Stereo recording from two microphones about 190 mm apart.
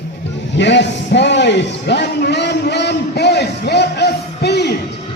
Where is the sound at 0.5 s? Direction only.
70° left (ahead or behind).